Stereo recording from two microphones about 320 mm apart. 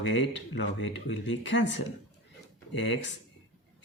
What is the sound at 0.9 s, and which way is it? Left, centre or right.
Speech, left.